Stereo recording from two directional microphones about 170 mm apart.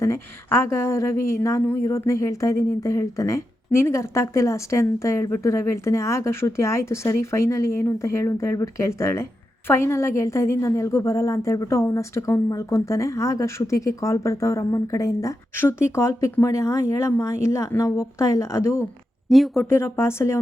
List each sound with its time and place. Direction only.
0.0 s speech: 15° left (ahead or behind)
19.3 s speech: centre (ahead or behind)
19.6 s speech: 15° left (ahead or behind)